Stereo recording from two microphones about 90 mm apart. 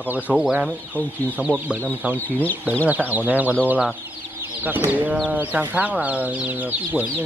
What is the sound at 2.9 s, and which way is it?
Speech, 20° right (ahead or behind).